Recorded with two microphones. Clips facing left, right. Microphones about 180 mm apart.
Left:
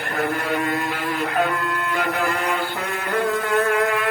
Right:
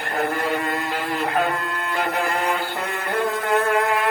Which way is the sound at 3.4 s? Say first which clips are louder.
Even; 50° right (ahead or behind).